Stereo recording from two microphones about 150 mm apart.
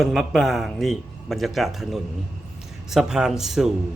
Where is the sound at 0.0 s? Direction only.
Centre (ahead or behind).